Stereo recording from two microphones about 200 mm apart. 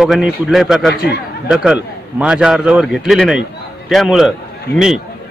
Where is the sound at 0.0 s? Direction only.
Centre (ahead or behind).